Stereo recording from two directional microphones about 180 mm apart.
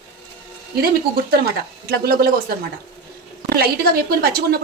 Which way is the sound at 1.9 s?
60° right (ahead or behind).